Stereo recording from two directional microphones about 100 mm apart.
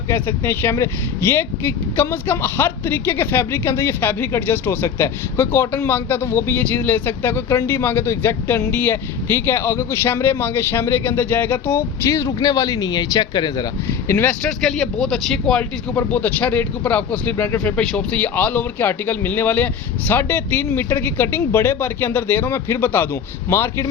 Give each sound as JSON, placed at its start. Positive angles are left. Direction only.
{"t": 0.1, "sound": "speech", "side_deg": 20}
{"t": 14.1, "sound": "speech", "side_deg": 20}
{"t": 14.4, "sound": "speech", "side_deg": 0}
{"t": 16.0, "sound": "speech", "side_deg": 15}